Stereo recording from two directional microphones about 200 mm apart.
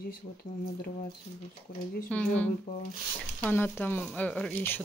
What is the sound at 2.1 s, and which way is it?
Speech, 5° left (ahead or behind).